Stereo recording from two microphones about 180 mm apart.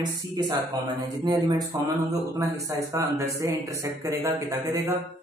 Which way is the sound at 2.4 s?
15° right (ahead or behind).